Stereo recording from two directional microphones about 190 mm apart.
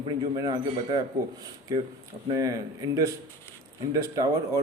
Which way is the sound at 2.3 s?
20° right (ahead or behind).